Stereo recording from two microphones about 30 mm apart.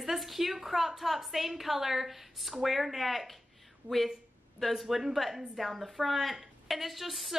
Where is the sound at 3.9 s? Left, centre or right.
Right.